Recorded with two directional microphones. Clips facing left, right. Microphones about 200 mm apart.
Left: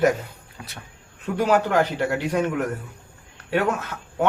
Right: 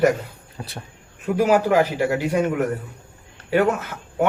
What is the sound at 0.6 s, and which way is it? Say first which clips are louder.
Speech: right 6 dB; 35° right (ahead or behind).